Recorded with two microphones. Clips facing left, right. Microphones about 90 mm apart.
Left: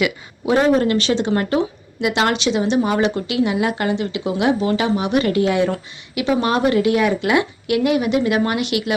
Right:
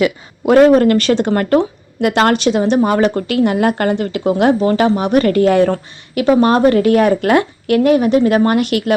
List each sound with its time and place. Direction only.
0.4 s a woman's voice: 60° right (ahead or behind)